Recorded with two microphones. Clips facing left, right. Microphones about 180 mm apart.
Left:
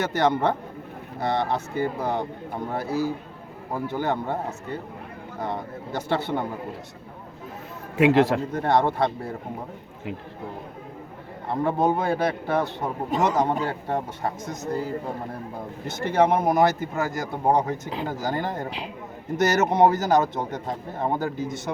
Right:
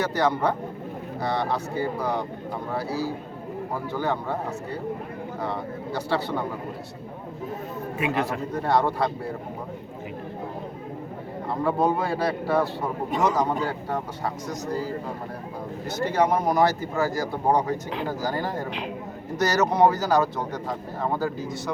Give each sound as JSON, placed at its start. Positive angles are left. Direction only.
{"t": 0.0, "sound": "a man's voice", "side_deg": 25}
{"t": 3.8, "sound": "a man's voice", "side_deg": 25}
{"t": 7.9, "sound": "a man's voice", "side_deg": 90}
{"t": 8.5, "sound": "a man's voice", "side_deg": 20}
{"t": 11.4, "sound": "a man's voice", "side_deg": 20}
{"t": 16.2, "sound": "a man's voice", "side_deg": 25}